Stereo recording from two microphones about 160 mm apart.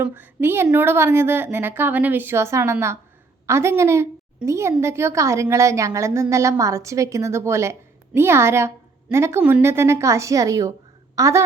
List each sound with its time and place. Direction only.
0.0 s a woman's voice: 15° right (ahead or behind)